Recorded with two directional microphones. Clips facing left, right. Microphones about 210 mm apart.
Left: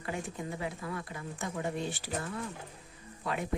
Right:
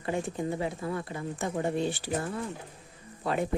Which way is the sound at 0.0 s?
30° right (ahead or behind).